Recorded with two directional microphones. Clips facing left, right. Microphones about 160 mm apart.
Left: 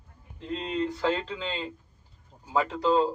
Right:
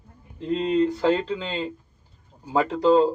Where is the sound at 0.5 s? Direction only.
40° right (ahead or behind).